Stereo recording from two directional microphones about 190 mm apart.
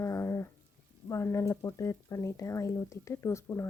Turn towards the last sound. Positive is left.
turn(degrees=15)  # may be behind; listen again after turning